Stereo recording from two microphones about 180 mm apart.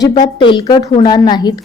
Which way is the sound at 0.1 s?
25° left (ahead or behind).